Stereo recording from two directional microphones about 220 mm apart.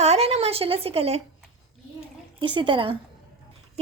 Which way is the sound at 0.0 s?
30° right (ahead or behind).